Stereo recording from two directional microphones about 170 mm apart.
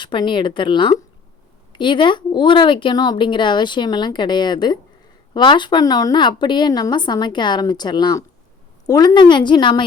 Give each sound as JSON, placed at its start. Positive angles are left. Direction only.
{"t": 0.0, "sound": "a woman's voice", "side_deg": 30}